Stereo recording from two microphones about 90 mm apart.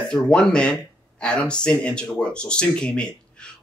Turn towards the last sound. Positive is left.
turn(degrees=10)  # may be behind; listen again after turning